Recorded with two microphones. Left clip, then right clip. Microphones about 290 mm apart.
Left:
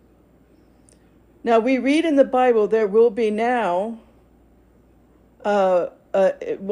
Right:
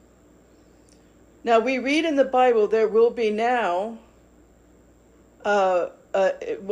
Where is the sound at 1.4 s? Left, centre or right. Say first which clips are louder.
Left 2 dB; left.